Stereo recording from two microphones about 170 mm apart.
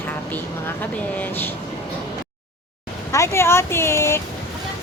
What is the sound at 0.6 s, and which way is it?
Speech, 10° left (ahead or behind).